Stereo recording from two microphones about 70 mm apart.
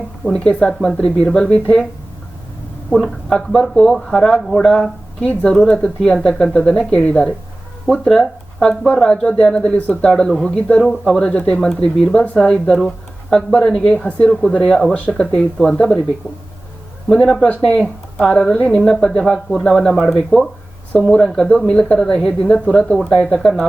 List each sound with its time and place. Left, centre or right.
0.3 s speech: centre
3.2 s speech: centre
4.7 s speech: centre
14.0 s speech: centre
15.4 s speech: centre
17.1 s speech: centre
17.5 s speech: left
18.5 s speech: centre